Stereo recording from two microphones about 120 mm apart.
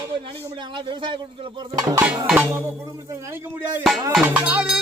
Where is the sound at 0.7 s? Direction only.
40° right (ahead or behind).